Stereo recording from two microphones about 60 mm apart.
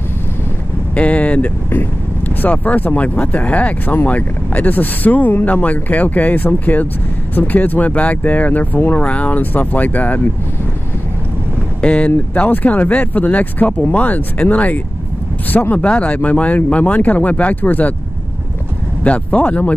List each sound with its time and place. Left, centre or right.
0.9 s speech: left
11.8 s speech: centre
19.0 s speech: left